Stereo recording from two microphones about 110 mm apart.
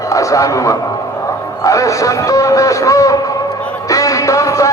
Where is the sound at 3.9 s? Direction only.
30° left (ahead or behind).